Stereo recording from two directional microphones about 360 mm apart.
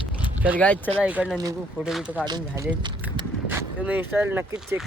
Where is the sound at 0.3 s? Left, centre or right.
Centre.